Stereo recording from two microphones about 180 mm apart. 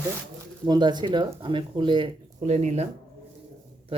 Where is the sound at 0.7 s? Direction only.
25° right (ahead or behind).